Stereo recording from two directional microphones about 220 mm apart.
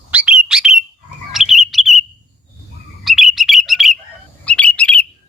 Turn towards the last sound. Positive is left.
turn(degrees=5)  # may be behind; listen again after turning